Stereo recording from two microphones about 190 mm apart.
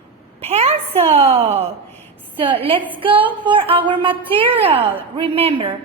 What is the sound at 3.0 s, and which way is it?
A woman's voice, 25° right (ahead or behind).